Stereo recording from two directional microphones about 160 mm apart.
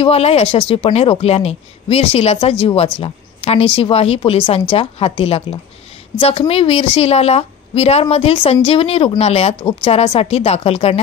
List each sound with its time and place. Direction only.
0.0 s a woman's voice: 40° left (ahead or behind)